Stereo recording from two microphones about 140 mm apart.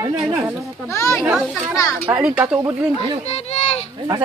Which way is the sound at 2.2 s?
5° right (ahead or behind).